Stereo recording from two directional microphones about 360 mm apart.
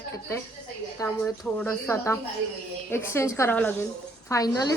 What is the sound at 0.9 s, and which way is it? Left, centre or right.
A woman's voice, centre.